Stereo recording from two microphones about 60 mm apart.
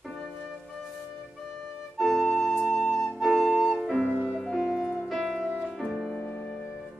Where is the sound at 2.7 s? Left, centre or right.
Centre.